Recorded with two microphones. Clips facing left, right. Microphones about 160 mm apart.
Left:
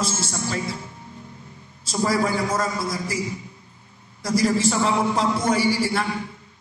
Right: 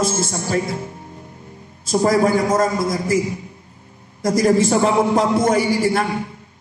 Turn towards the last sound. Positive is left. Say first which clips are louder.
# right 4 dB
turn(degrees=-50)  # may be behind; listen again after turning